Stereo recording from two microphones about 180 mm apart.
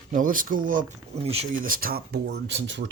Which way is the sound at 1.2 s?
35° right (ahead or behind).